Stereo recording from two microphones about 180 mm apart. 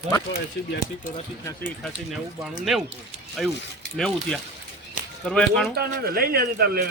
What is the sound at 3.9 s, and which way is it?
Speech, 5° left (ahead or behind).